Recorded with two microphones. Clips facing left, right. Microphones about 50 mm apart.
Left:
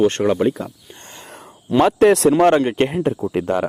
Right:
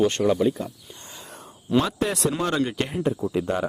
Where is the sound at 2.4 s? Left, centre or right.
Left.